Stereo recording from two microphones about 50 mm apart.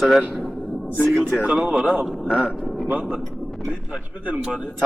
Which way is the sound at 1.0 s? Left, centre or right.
Centre.